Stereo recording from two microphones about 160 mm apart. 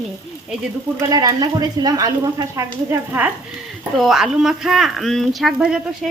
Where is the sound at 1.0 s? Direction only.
25° right (ahead or behind).